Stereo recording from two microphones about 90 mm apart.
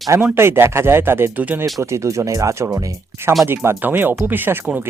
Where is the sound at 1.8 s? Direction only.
35° right (ahead or behind).